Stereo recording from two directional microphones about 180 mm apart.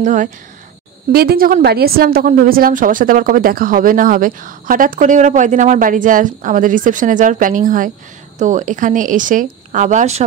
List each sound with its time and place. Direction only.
0.0 s a woman's voice: 45° right (ahead or behind)
1.1 s a woman's voice: 55° right (ahead or behind); by 10.2 s 40° right (ahead or behind)